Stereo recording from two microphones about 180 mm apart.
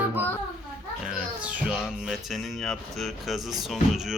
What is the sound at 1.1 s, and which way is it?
Music, 5° right (ahead or behind).